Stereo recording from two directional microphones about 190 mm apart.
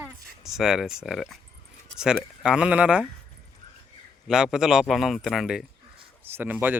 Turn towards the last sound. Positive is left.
turn(degrees=-10)  # may be behind; listen again after turning